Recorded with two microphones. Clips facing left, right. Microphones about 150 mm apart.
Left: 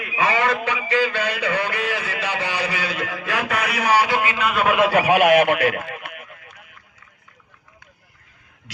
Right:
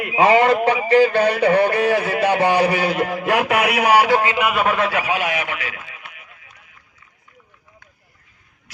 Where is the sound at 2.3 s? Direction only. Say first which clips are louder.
Right 10 dB; 55° right (ahead or behind).